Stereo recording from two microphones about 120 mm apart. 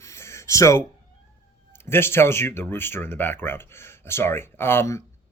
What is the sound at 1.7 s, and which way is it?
Speech, 20° left (ahead or behind).